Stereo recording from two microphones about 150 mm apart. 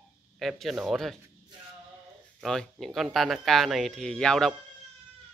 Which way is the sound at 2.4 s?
Centre (ahead or behind).